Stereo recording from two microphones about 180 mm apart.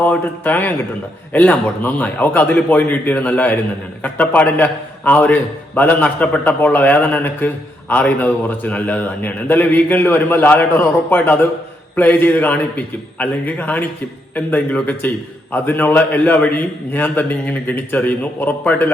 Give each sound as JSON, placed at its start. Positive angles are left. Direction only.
{"t": 0.0, "sound": "a man's voice", "side_deg": 10}